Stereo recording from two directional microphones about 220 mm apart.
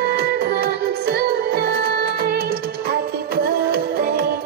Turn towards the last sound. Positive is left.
turn(degrees=-45)  # may be behind; listen again after turning